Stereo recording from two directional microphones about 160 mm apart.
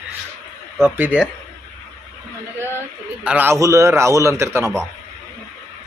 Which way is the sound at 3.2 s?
10° right (ahead or behind).